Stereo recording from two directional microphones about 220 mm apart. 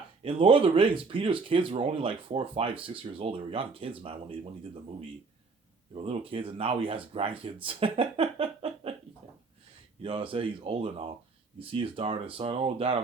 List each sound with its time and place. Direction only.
0.2 s speech: 25° right (ahead or behind)
10.0 s speech: 25° right (ahead or behind)